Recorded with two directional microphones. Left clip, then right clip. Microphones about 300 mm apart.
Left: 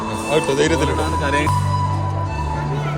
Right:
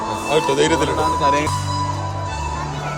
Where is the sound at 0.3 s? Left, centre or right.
Centre.